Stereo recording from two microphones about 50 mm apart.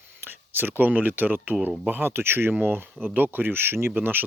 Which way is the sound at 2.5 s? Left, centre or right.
Right.